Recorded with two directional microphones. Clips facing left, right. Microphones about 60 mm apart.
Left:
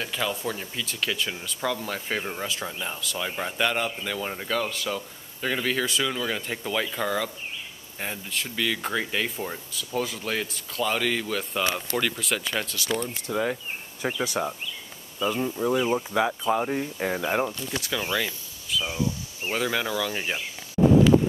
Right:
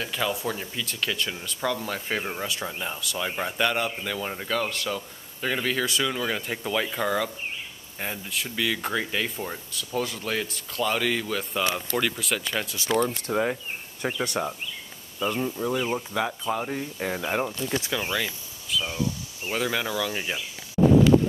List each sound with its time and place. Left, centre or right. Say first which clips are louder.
0.0 s speech: right 1 dB; centre
13.3 s speech: even; right
14.0 s speech: even; centre